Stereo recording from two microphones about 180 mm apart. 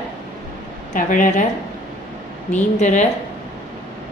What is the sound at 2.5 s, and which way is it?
Speech, 40° left (ahead or behind).